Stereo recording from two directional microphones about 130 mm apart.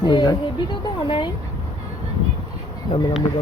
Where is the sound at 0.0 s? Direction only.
35° left (ahead or behind).